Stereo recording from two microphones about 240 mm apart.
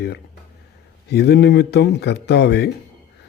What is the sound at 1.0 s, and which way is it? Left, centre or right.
A man's voice, left.